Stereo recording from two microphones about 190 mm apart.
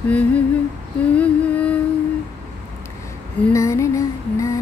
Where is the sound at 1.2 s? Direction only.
5° left (ahead or behind).